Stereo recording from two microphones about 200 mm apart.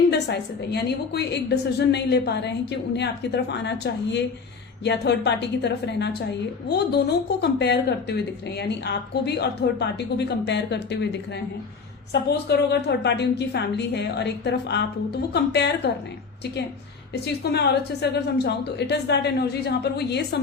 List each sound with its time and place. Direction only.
0.1 s a woman's voice: 60° left (ahead or behind)
12.5 s a woman's voice: 55° left (ahead or behind)
17.4 s a woman's voice: 55° left (ahead or behind)